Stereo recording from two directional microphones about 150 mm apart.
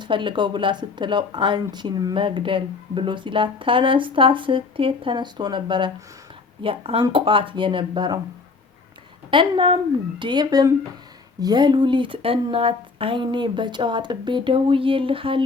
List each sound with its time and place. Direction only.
0.0 s speech: 35° right (ahead or behind)
9.3 s speech: 35° right (ahead or behind)